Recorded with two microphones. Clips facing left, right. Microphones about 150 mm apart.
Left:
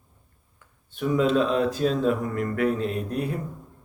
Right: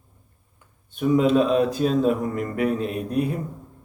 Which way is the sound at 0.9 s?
20° right (ahead or behind).